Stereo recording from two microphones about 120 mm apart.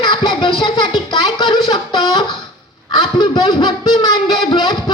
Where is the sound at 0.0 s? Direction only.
40° left (ahead or behind).